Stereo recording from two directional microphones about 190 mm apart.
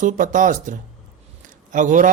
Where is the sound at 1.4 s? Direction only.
40° right (ahead or behind).